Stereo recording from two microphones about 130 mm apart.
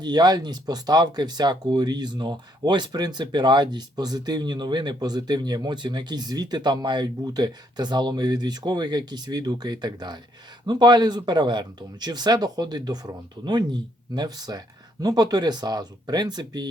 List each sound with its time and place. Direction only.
0.0 s speech: 30° right (ahead or behind)